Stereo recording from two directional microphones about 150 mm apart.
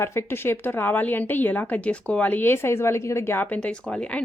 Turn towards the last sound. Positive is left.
turn(degrees=10)  # may be behind; listen again after turning